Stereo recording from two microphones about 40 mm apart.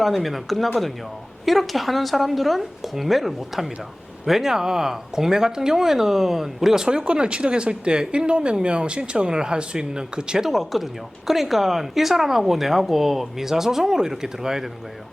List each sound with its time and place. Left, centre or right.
0.0 s a woman's voice: centre
10.5 s a woman's voice: centre